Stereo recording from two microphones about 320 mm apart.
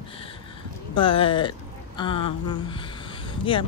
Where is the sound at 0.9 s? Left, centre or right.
Centre.